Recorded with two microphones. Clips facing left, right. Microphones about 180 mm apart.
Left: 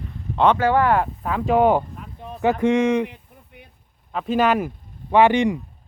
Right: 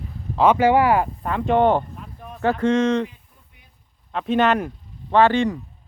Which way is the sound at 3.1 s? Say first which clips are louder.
Left 8 dB; 65° left (ahead or behind).